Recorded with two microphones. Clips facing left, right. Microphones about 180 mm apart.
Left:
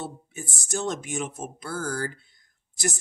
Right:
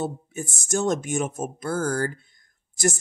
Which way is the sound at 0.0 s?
45° right (ahead or behind).